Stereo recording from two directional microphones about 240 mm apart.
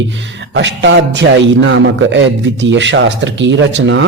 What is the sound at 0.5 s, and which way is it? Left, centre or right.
Speech, right.